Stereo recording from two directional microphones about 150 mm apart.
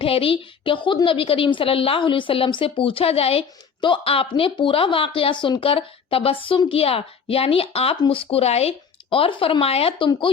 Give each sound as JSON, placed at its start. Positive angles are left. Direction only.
{"t": 0.0, "sound": "a woman's voice", "side_deg": 40}